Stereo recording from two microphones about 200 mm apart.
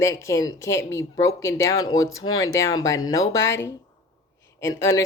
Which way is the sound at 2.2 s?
90° left.